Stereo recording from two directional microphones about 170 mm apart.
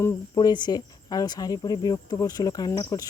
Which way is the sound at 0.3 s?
25° left (ahead or behind).